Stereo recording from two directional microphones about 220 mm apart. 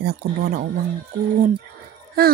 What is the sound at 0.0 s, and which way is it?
Speech, 45° right (ahead or behind).